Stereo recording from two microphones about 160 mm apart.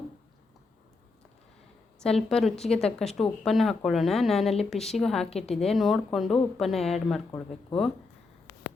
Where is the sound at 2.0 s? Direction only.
5° left (ahead or behind).